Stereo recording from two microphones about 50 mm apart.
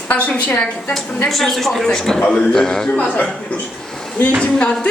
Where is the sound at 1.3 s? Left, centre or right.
Centre.